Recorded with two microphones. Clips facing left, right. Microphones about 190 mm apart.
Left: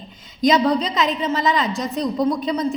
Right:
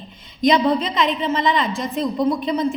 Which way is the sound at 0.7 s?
Centre (ahead or behind).